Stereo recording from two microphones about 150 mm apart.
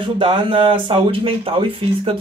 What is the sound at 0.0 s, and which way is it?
Speech, 35° right (ahead or behind).